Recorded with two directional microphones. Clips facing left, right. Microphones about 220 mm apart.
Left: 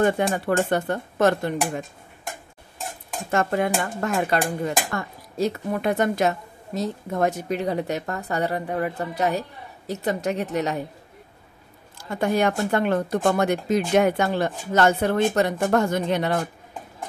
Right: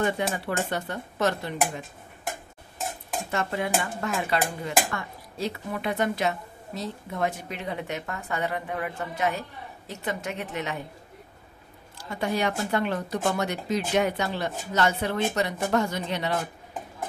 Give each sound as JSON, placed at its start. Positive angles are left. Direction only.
{"t": 0.0, "sound": "speech", "side_deg": 50}
{"t": 3.3, "sound": "speech", "side_deg": 50}
{"t": 12.2, "sound": "speech", "side_deg": 50}